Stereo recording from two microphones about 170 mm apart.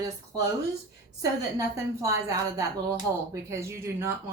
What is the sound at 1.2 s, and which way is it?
A woman's voice, 20° right (ahead or behind).